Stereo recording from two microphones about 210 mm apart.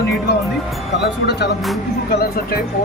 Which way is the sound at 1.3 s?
50° left (ahead or behind).